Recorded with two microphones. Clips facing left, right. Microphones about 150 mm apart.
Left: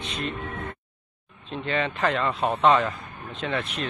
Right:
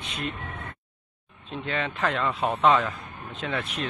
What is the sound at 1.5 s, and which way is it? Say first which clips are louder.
Speech: left 3 dB; centre (ahead or behind).